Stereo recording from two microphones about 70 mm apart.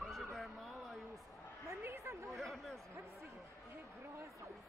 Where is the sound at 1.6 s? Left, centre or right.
Right.